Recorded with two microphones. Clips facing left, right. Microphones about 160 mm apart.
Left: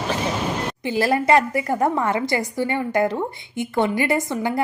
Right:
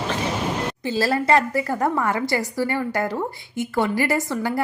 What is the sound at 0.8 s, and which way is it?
A woman's voice, 15° left (ahead or behind).